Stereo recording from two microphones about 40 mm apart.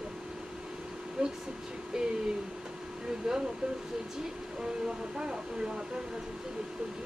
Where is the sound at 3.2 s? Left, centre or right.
Centre.